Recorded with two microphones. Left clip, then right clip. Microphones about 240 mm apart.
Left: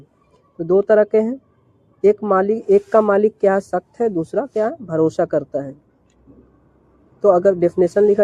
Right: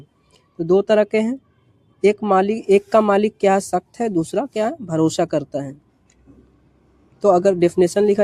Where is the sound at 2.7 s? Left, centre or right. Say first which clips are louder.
Left 1 dB; right.